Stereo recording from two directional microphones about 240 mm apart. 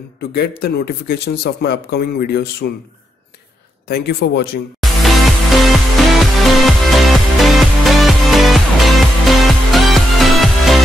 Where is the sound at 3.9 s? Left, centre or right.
Left.